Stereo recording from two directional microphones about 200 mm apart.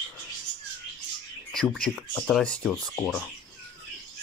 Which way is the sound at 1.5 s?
Centre (ahead or behind).